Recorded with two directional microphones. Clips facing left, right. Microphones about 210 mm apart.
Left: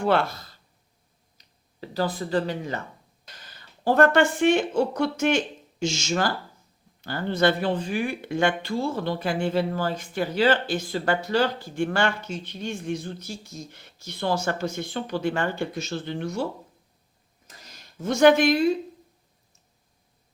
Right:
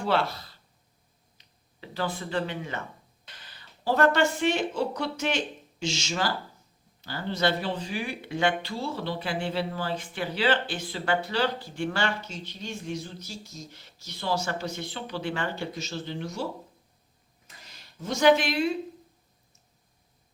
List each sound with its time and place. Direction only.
0.0 s speech: 50° left (ahead or behind)
18.0 s speech: 55° left (ahead or behind)